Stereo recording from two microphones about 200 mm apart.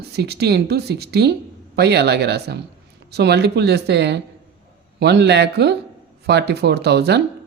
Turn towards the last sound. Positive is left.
turn(degrees=-55)  # may be behind; listen again after turning